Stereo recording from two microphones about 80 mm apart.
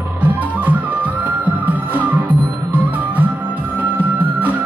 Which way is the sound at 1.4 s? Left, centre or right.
Centre.